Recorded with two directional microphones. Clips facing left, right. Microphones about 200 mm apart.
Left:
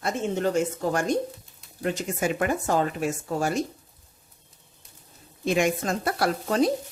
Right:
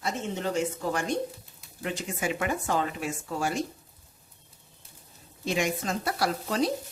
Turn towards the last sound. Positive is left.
turn(degrees=50)  # may be behind; listen again after turning